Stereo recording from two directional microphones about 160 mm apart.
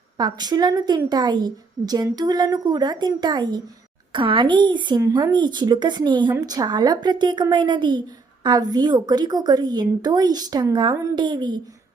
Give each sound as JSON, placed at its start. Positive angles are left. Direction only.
{"t": 0.2, "sound": "a woman's voice", "side_deg": -25}